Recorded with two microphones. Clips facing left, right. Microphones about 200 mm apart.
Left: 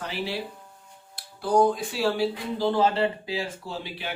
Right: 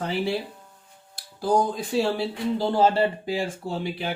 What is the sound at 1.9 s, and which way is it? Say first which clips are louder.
Speech: right 3 dB; 25° right (ahead or behind).